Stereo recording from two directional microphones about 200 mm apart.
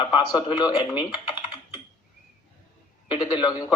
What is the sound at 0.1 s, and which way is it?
Speech, 20° left (ahead or behind).